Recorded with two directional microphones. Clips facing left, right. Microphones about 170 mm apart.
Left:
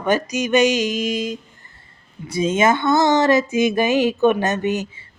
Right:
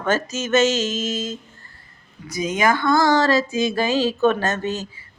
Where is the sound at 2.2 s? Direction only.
30° left (ahead or behind).